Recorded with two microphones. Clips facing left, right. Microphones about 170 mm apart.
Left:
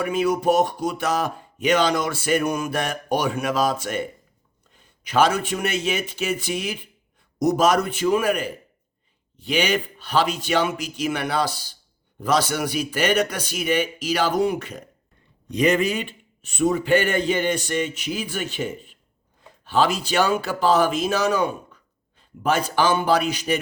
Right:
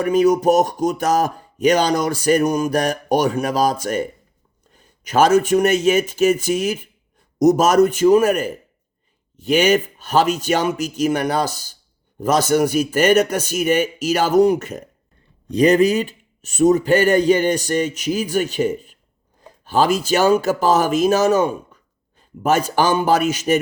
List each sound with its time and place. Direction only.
0.0 s a man's voice: 40° right (ahead or behind)